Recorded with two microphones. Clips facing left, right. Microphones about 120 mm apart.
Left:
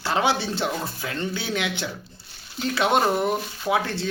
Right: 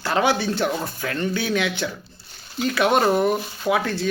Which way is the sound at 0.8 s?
50° right (ahead or behind).